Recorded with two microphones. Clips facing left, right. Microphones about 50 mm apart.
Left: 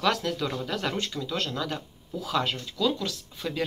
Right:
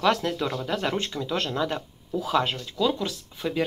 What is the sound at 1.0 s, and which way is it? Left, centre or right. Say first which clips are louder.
Speech: right 2 dB; right.